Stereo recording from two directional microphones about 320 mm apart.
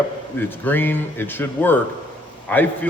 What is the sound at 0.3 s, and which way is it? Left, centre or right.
A man's voice, centre.